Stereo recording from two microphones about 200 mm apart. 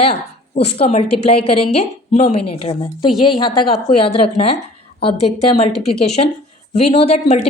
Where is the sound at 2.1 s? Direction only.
35° left (ahead or behind).